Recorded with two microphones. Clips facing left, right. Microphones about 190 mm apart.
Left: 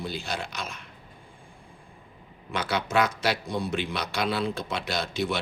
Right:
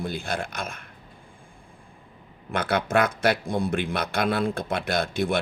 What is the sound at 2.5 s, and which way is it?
A man's voice, 55° right (ahead or behind).